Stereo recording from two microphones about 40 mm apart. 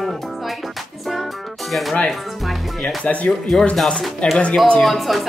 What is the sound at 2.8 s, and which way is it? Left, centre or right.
Speech, left.